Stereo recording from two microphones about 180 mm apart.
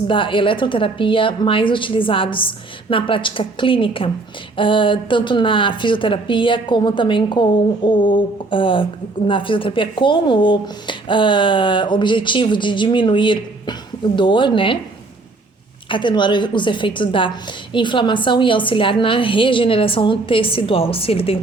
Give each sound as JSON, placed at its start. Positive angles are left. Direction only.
{"t": 0.1, "sound": "a woman's voice", "side_deg": 30}
{"t": 15.9, "sound": "a woman's voice", "side_deg": 25}